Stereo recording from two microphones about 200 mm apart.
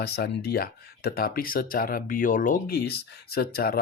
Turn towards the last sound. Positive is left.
turn(degrees=50)  # may be behind; listen again after turning